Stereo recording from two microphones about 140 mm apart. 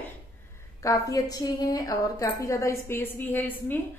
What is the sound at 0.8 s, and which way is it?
A woman's voice, 25° left (ahead or behind).